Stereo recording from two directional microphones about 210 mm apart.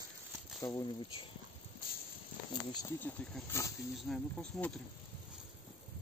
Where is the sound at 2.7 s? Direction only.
15° left (ahead or behind).